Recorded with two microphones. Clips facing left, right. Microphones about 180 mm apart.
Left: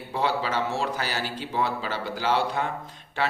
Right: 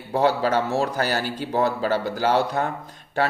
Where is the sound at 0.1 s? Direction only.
45° right (ahead or behind).